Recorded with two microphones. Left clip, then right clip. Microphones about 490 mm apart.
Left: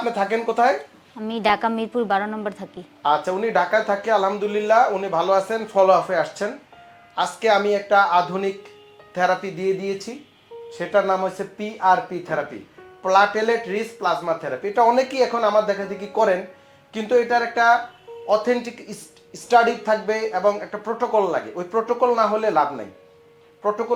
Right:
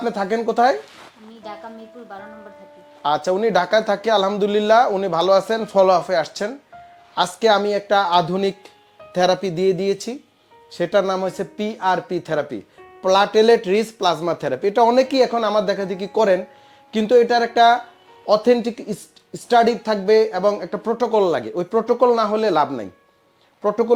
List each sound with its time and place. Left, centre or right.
0.0 s music: right
1.3 s a woman's voice: left
3.0 s speech: right
7.2 s speech: right
9.1 s music: right
10.7 s speech: right
16.9 s speech: right